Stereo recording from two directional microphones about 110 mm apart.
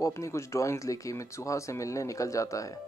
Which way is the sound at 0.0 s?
25° left (ahead or behind).